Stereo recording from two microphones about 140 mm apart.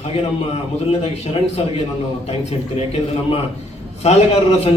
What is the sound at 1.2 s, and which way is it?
A woman's voice, 45° left (ahead or behind).